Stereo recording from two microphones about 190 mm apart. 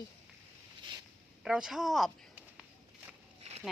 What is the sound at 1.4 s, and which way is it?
Speech, 5° right (ahead or behind).